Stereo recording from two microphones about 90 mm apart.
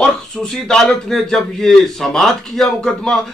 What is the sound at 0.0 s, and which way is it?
Speech, 5° left (ahead or behind).